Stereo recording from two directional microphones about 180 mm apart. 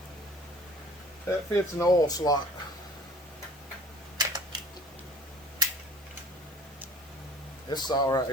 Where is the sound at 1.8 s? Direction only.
20° left (ahead or behind).